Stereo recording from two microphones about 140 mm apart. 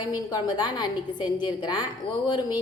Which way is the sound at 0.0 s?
30° left (ahead or behind).